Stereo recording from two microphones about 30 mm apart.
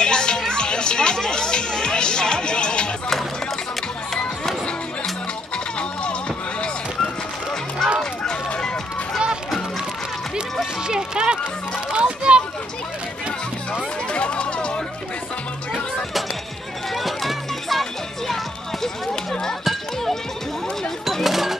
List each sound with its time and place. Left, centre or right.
0.0 s music: left
5.8 s music: left
7.8 s a sound: centre
10.9 s music: right
11.9 s children playing: right
14.1 s chatter: left
16.9 s music: centre
19.6 s a sound: centre
21.2 s a sound: centre